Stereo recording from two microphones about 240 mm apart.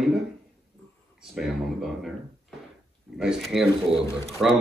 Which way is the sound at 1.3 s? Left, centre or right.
Centre.